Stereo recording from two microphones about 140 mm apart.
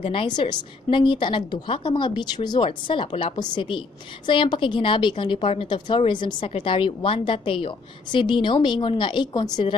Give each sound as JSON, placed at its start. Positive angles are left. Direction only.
{"t": 0.0, "sound": "a woman's voice", "side_deg": 40}